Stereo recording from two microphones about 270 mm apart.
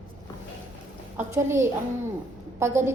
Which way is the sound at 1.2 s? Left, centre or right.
Centre.